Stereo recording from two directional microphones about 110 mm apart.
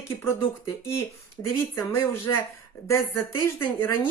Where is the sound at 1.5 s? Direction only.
20° left (ahead or behind).